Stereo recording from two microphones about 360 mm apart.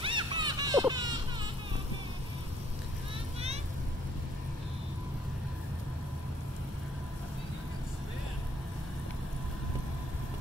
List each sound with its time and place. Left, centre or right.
0.0 s music: centre